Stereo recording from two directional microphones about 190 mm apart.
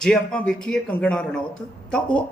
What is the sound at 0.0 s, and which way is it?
A man's voice, 5° left (ahead or behind).